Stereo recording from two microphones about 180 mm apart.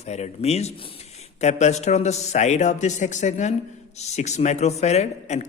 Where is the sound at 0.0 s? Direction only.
35° left (ahead or behind).